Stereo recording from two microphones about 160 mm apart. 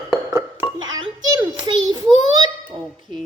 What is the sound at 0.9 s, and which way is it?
A woman's voice, 25° right (ahead or behind).